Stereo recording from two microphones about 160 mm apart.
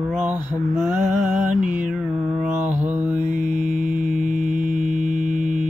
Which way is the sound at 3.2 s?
50° right (ahead or behind).